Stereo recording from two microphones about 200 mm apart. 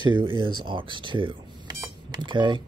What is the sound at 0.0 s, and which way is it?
Speech, 20° right (ahead or behind).